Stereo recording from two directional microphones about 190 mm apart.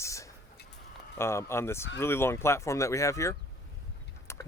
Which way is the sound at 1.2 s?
15° left (ahead or behind).